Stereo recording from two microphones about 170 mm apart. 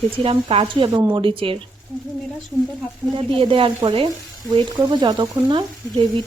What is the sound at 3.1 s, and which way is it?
Speech, 30° right (ahead or behind).